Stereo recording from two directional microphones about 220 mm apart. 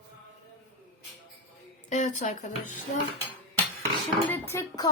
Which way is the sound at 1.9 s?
35° left (ahead or behind).